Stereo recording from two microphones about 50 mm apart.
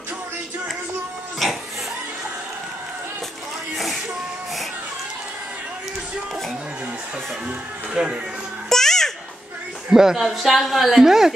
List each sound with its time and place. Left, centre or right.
1.4 s a woman's voice: centre
3.7 s a sound: centre
7.4 s music: centre
8.6 s music: centre
9.8 s a woman's voice: centre